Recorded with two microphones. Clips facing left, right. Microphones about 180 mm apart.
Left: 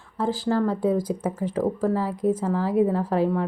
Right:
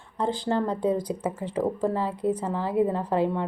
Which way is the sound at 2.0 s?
10° left (ahead or behind).